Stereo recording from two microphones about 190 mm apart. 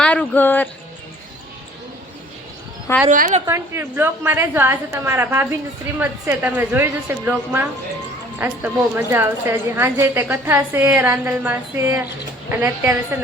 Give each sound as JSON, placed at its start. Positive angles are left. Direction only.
{"t": 0.0, "sound": "a sound", "side_deg": 5}
{"t": 3.1, "sound": "a woman's voice", "side_deg": -40}
{"t": 3.4, "sound": "a woman's voice", "side_deg": -15}